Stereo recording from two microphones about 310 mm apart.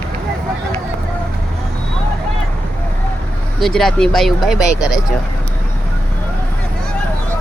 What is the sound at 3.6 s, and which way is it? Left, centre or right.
Speech, centre.